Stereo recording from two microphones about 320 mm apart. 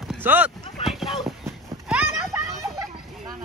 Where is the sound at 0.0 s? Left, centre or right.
Centre.